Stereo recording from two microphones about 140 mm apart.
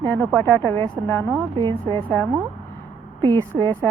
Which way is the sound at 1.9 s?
35° right (ahead or behind).